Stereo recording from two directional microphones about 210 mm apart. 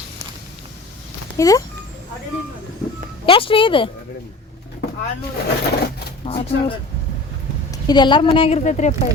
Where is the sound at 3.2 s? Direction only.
25° left (ahead or behind).